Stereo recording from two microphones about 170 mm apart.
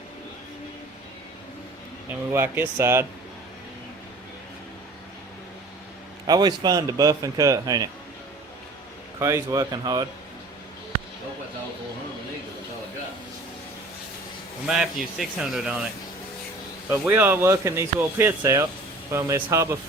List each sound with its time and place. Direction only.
2.0 s speech: 15° right (ahead or behind)
6.2 s a man's voice: 25° right (ahead or behind)
9.1 s a man's voice: 20° right (ahead or behind)
14.7 s speech: centre (ahead or behind)
16.9 s speech: 15° right (ahead or behind)